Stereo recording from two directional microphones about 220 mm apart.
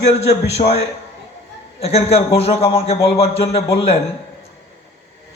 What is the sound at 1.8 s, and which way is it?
A man's voice, 25° left (ahead or behind).